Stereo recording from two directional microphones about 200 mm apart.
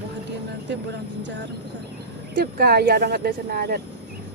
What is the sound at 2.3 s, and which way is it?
Speech, 50° right (ahead or behind).